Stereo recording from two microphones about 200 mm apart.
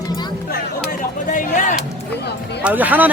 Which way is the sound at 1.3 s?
40° left (ahead or behind).